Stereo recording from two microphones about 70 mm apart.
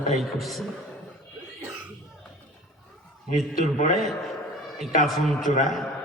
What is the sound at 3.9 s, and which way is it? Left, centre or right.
A man's voice, centre.